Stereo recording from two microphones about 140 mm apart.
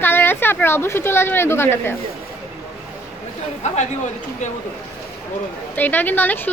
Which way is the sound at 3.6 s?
55° left (ahead or behind).